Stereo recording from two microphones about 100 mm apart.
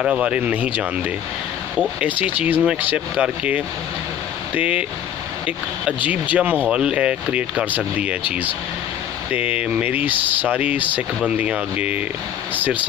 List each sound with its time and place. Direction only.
0.0 s speech: 10° right (ahead or behind)
6.0 s speech: 15° right (ahead or behind)
9.3 s speech: 10° right (ahead or behind)